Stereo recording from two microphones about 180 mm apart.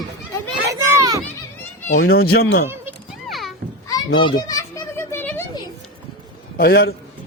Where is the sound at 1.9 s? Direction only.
60° left (ahead or behind).